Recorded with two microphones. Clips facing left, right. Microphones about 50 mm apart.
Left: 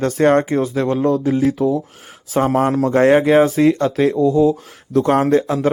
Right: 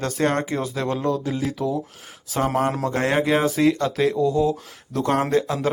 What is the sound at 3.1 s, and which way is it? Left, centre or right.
Speech, centre.